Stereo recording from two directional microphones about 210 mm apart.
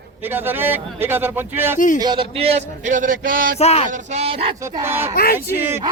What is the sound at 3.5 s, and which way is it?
Speech, 30° left (ahead or behind).